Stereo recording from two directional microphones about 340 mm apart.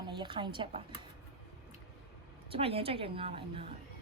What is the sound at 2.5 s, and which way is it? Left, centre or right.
A woman's voice, centre.